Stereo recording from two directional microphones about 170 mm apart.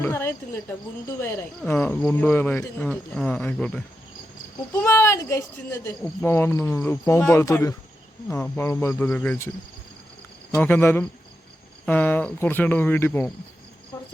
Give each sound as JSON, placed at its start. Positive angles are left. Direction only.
{"t": 0.0, "sound": "speech", "side_deg": 15}
{"t": 4.9, "sound": "speech", "side_deg": 15}
{"t": 10.5, "sound": "speech", "side_deg": 10}